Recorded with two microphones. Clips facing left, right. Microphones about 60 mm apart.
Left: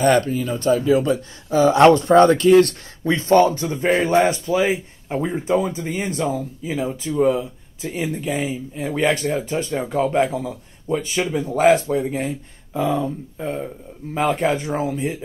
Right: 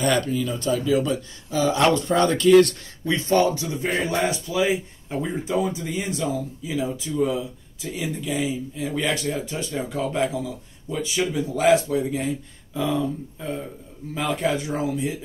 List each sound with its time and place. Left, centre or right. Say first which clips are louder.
0.0 s a man's voice: left 5 dB; left